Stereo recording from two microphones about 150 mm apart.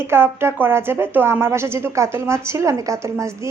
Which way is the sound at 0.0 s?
15° right (ahead or behind).